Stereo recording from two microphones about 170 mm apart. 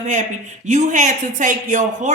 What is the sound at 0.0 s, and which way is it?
Speech, 45° right (ahead or behind).